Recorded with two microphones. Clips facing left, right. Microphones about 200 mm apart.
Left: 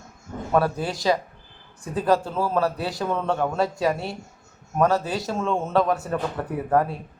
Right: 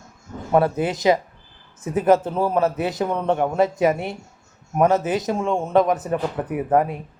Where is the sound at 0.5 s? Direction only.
20° right (ahead or behind).